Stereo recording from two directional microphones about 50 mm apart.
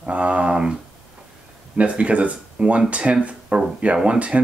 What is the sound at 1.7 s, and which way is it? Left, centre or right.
Speech, right.